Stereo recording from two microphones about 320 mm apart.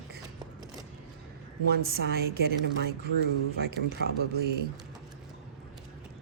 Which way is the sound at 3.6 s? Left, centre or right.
Right.